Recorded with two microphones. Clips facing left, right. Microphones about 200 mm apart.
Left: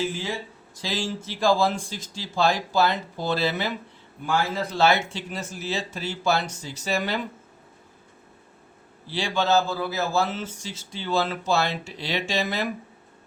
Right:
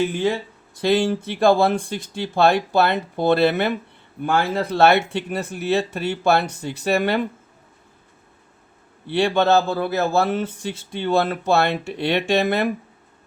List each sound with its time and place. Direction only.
0.0 s speech: 60° right (ahead or behind)
9.0 s speech: 60° right (ahead or behind)